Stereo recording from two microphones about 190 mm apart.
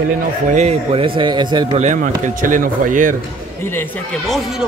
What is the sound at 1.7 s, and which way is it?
Speech, 40° right (ahead or behind).